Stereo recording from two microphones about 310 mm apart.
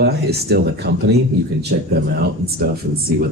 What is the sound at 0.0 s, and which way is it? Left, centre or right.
A man's voice, right.